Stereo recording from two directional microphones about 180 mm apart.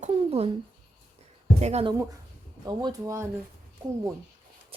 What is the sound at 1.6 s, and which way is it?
Speech, 35° right (ahead or behind).